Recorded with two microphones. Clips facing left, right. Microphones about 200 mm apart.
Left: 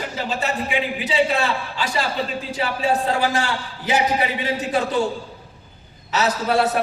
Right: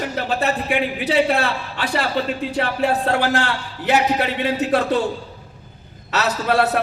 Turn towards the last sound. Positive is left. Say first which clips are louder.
# right 1 dB
turn(degrees=-65)  # may be behind; listen again after turning